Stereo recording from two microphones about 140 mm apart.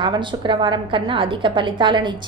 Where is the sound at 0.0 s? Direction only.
35° right (ahead or behind).